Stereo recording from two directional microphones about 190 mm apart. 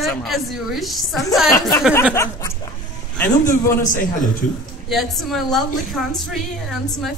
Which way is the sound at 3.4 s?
40° left (ahead or behind).